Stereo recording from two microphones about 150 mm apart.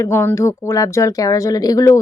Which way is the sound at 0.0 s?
15° left (ahead or behind).